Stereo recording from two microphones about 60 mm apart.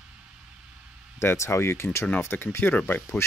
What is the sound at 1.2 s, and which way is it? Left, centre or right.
Speech, left.